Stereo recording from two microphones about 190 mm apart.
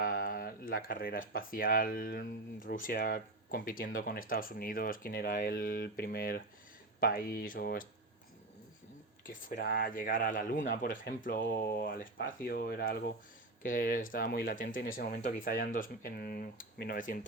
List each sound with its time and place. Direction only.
0.0 s speech: 50° left (ahead or behind)
9.2 s speech: 55° left (ahead or behind)